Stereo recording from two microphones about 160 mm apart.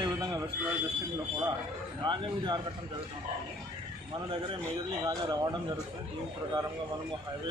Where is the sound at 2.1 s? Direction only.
30° right (ahead or behind).